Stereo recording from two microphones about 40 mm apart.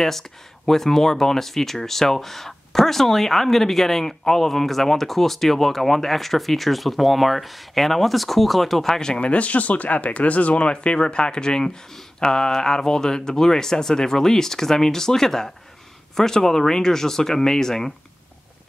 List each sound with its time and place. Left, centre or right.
0.0 s speech: centre
9.2 s speech: left; by 17.9 s centre